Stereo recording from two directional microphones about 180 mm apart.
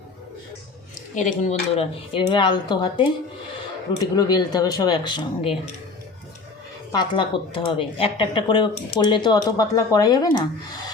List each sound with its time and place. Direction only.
1.1 s speech: 40° left (ahead or behind)
6.9 s speech: 25° left (ahead or behind)